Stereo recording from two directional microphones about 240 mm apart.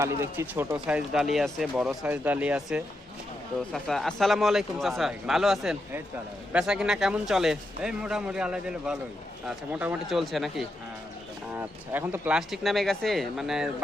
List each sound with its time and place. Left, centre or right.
0.0 s speech: centre